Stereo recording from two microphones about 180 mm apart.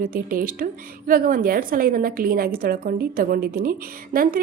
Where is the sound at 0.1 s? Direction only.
50° right (ahead or behind).